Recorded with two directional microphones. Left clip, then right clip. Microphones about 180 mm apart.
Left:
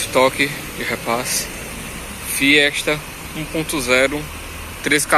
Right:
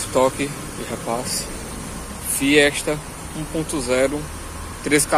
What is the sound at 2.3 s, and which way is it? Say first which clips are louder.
Speech: left 2 dB; centre (ahead or behind).